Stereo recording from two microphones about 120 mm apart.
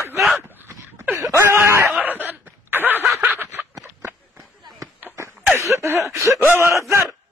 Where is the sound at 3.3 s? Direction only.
15° right (ahead or behind).